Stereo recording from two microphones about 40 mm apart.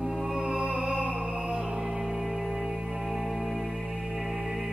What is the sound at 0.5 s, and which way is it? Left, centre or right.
Music, centre.